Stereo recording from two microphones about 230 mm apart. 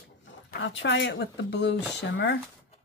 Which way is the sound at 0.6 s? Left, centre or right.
Left.